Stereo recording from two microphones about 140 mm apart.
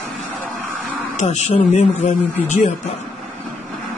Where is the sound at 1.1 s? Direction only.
55° left (ahead or behind).